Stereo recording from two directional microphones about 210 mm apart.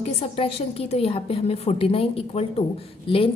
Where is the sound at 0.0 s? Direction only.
30° left (ahead or behind).